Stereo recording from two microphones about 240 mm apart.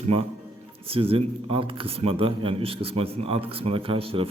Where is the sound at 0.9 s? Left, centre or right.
Right.